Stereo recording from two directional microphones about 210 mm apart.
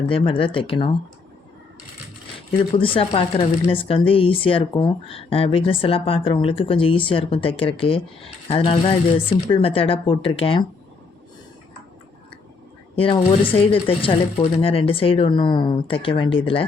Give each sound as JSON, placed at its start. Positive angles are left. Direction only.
{"t": 0.0, "sound": "speech", "side_deg": 25}
{"t": 2.7, "sound": "speech", "side_deg": 25}
{"t": 13.0, "sound": "speech", "side_deg": 25}